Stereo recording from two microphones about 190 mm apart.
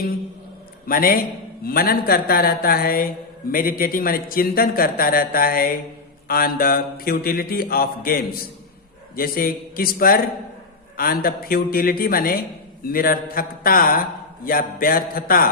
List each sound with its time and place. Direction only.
0.9 s speech: 50° left (ahead or behind)